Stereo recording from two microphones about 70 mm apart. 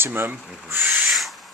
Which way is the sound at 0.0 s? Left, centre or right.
Right.